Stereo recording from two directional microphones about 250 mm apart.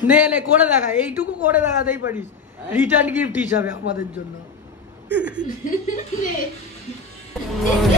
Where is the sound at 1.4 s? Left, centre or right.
Centre.